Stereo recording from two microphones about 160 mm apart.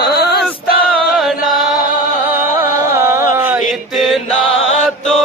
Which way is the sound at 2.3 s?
15° right (ahead or behind).